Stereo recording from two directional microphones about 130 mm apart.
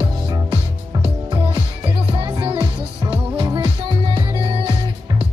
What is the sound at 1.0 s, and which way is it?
Music, 40° right (ahead or behind).